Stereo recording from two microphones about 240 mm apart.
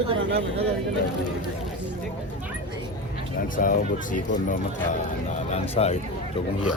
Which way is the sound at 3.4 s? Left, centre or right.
Left.